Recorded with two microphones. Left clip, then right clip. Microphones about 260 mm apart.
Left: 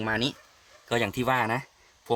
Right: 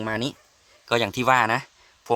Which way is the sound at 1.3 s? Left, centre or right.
Right.